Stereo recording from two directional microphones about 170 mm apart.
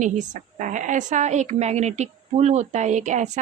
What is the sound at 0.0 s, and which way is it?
Speech, 45° right (ahead or behind).